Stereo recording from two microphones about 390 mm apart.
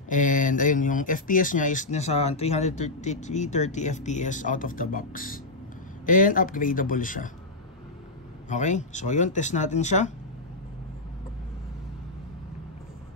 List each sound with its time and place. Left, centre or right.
0.1 s speech: centre
8.5 s speech: centre